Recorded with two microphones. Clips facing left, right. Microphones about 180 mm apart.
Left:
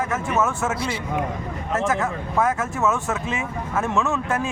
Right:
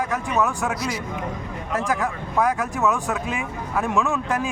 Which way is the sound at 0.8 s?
30° left (ahead or behind).